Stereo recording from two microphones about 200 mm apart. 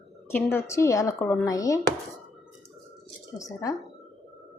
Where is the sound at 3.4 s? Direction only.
15° left (ahead or behind).